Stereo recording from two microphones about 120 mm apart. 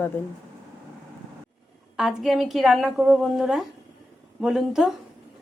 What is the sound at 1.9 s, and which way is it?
A woman's voice, centre (ahead or behind).